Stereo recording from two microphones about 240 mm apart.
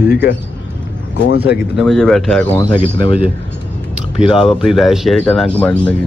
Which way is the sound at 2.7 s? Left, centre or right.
Centre.